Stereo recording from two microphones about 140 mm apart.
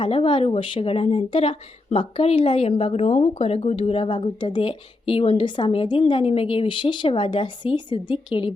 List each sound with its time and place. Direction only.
0.0 s a woman's voice: 40° left (ahead or behind)